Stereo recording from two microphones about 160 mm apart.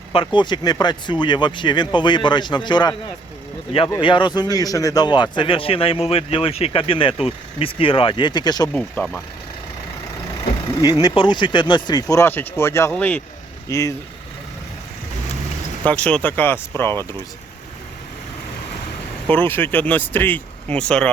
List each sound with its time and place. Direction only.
0.1 s speech: 30° left (ahead or behind)
4.0 s speech: 30° left (ahead or behind)
11.0 s speech: 30° left (ahead or behind)
15.9 s speech: 5° left (ahead or behind)
19.3 s speech: 10° left (ahead or behind)